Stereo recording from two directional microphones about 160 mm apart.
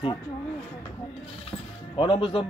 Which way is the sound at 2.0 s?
30° left (ahead or behind).